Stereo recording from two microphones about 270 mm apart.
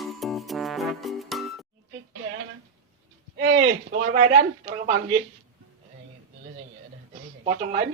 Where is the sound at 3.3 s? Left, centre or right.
Right.